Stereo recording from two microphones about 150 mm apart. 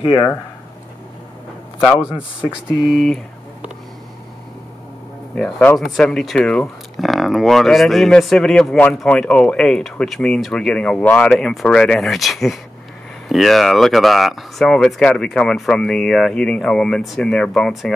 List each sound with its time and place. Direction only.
0.0 s speech: 30° left (ahead or behind)
2.0 s a man's voice: 10° right (ahead or behind)
2.4 s speech: 5° left (ahead or behind)
5.3 s speech: 10° left (ahead or behind)